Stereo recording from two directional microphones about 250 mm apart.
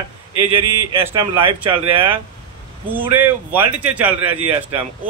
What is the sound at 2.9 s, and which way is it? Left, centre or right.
Speech, centre.